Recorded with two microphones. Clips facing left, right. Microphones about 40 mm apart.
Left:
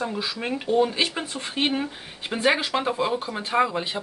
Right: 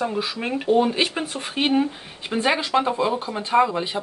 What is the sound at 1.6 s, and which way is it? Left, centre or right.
Speech, centre.